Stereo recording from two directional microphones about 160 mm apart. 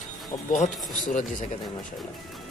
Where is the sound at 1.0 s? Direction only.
55° left (ahead or behind).